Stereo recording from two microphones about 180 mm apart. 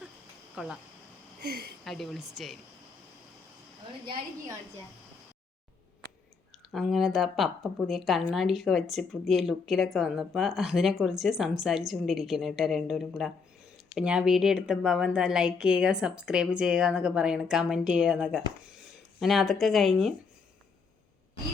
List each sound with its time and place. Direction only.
0.5 s speech: 5° right (ahead or behind)
1.4 s speech: 60° right (ahead or behind)
1.8 s speech: centre (ahead or behind)
6.7 s speech: centre (ahead or behind)